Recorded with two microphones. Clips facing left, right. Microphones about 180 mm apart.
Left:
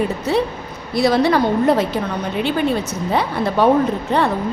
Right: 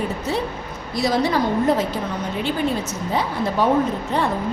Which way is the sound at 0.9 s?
65° left (ahead or behind).